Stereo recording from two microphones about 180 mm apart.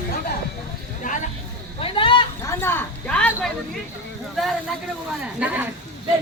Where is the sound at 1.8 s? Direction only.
30° left (ahead or behind).